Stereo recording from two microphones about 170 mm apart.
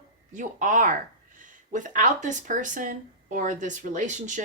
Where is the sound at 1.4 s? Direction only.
50° right (ahead or behind).